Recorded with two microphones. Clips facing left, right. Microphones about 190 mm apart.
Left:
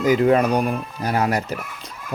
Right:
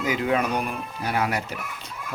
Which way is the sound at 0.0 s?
40° left (ahead or behind).